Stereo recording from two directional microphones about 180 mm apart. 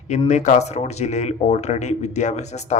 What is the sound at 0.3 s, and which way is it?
Speech, 40° left (ahead or behind).